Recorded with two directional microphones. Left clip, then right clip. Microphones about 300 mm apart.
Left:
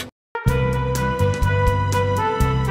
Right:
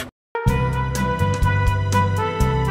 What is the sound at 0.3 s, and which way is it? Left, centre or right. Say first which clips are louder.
Music: left 1 dB; centre.